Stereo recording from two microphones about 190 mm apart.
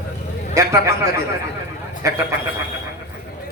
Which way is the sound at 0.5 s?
15° right (ahead or behind).